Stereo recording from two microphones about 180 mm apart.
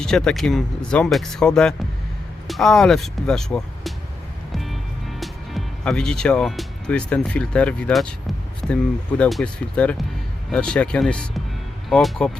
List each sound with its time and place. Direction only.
0.0 s speech: 5° left (ahead or behind)
4.5 s music: centre (ahead or behind)
8.7 s speech: 5° left (ahead or behind)